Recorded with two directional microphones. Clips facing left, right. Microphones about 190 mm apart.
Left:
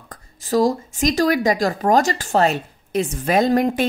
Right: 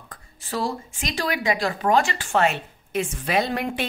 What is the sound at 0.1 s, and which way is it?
Speech, 40° left (ahead or behind).